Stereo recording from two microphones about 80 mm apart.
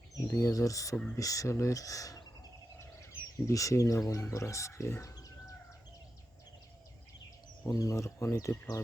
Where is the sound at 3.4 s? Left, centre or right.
Left.